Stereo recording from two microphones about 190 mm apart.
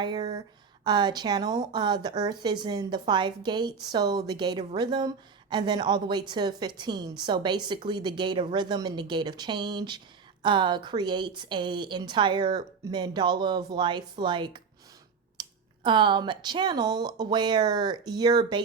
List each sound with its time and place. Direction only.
0.0 s speech: 20° right (ahead or behind)